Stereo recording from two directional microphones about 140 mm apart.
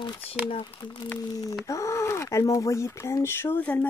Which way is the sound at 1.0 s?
20° left (ahead or behind).